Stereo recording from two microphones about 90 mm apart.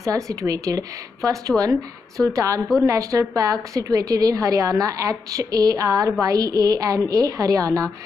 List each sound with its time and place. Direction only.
0.0 s a woman's voice: 40° right (ahead or behind)